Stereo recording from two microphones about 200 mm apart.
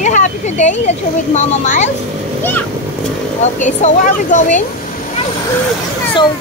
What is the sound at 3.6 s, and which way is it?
Speech, 35° left (ahead or behind).